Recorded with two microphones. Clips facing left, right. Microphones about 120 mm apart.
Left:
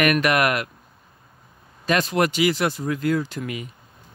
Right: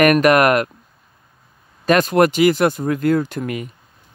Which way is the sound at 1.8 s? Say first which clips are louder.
Right 7 dB; 50° right (ahead or behind).